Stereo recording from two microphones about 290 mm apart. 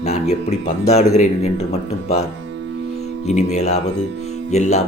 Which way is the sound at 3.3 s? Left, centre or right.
Left.